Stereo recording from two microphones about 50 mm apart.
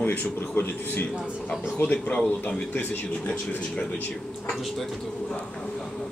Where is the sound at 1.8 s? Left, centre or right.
Left.